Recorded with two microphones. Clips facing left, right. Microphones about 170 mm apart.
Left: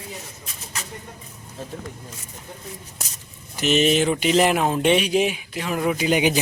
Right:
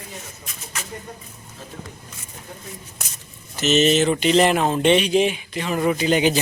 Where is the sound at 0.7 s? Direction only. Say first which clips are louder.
Right 1 dB; 35° left (ahead or behind).